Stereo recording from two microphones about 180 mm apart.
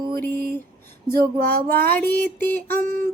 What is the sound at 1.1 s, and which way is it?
Speech, 60° right (ahead or behind).